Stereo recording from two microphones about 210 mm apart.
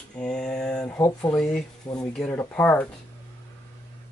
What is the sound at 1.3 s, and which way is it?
Speech, 5° left (ahead or behind).